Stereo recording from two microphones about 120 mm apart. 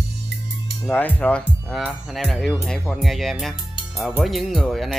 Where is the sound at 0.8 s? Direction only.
15° left (ahead or behind).